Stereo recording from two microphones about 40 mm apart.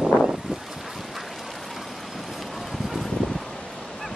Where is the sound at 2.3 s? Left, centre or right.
Centre.